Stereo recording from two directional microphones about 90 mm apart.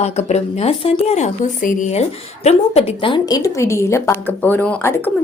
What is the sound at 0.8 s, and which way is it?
Speech, 90° left.